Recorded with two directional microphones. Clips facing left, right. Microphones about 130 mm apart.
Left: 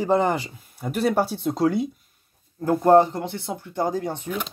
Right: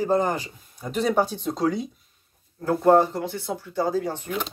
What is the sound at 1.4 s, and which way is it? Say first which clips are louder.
Speech: left 3 dB; 15° left (ahead or behind).